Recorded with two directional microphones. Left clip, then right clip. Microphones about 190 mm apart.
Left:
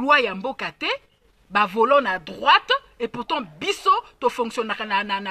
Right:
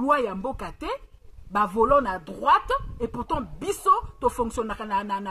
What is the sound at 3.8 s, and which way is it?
Speech, 25° left (ahead or behind).